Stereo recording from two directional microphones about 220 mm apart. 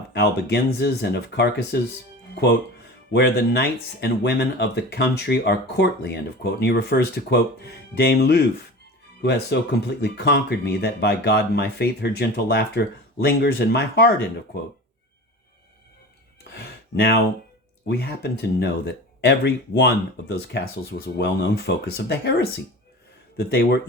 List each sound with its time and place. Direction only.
0.1 s speech: 50° left (ahead or behind)
16.4 s a sound: 45° left (ahead or behind)
17.8 s speech: 45° left (ahead or behind)
23.4 s speech: 50° left (ahead or behind)